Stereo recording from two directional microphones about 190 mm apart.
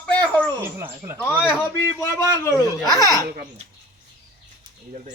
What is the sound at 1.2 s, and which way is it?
A man's voice, 10° left (ahead or behind).